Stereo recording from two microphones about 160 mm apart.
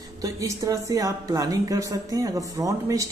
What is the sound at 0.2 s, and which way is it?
Speech, 20° right (ahead or behind).